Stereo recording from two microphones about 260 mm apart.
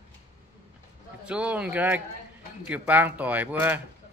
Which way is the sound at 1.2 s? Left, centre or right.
Centre.